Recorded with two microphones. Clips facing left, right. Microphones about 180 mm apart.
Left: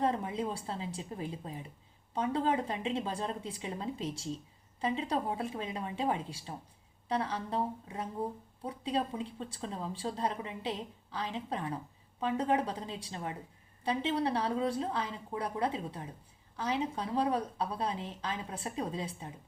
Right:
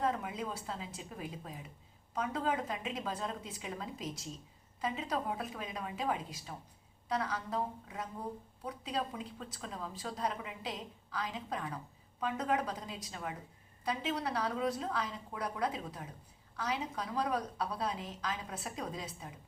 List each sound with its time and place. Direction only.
0.0 s a woman's voice: 30° left (ahead or behind)